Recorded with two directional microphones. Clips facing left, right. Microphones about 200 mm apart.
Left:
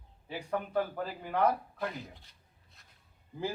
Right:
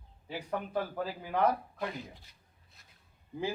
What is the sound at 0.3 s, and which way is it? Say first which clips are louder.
Speech: left 1 dB; 10° right (ahead or behind).